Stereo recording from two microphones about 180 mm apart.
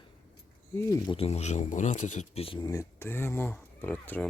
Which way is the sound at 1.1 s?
35° left (ahead or behind).